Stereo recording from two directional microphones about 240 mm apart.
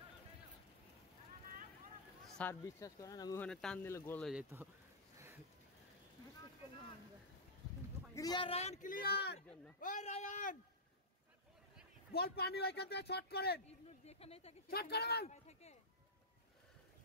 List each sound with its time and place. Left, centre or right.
2.3 s speech: centre
3.4 s speech: centre
5.1 s a sound: centre
8.1 s a man's voice: centre; by 9.4 s left
9.8 s a man's voice: left
12.1 s a man's voice: left
14.0 s speech: left
14.7 s a man's voice: left
15.2 s a sound: left